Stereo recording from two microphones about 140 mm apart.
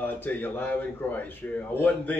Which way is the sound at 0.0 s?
15° left (ahead or behind).